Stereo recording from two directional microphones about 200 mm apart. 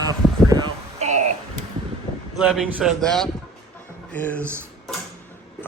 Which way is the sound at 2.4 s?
5° right (ahead or behind).